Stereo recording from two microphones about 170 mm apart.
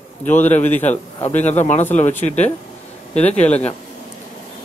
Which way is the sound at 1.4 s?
45° left (ahead or behind).